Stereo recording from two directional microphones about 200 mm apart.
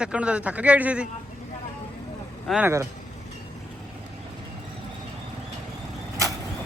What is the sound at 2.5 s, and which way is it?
Speech, 10° right (ahead or behind).